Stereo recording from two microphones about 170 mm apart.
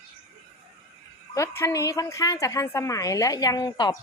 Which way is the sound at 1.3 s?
15° left (ahead or behind).